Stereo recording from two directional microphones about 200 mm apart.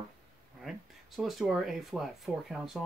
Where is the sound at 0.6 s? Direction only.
Centre (ahead or behind).